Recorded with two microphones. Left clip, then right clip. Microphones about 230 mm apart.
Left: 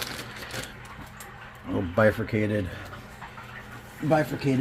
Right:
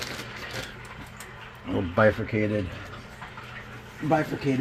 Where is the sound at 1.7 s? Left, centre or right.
Centre.